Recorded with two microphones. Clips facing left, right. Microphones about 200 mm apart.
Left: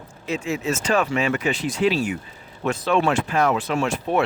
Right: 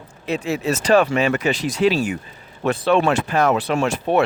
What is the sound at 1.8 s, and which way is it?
Speech, 80° right.